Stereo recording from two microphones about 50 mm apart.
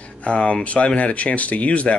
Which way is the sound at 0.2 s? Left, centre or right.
Left.